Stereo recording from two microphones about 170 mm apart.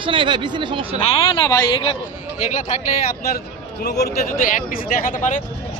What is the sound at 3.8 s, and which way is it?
Speech, 70° left (ahead or behind).